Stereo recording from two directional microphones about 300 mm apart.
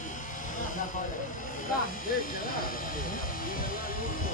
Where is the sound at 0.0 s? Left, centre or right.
Left.